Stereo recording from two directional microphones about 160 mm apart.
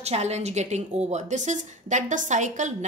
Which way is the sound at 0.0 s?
45° right (ahead or behind).